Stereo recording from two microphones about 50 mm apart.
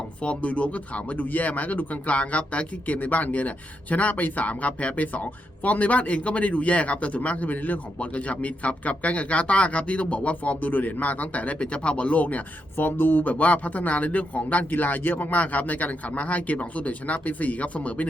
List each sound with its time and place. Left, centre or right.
0.2 s speech: left
12.7 s speech: left